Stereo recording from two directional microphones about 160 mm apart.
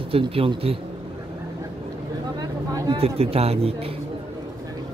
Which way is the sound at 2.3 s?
25° right (ahead or behind).